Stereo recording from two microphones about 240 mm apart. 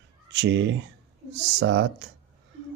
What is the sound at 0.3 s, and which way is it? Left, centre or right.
Speech, right.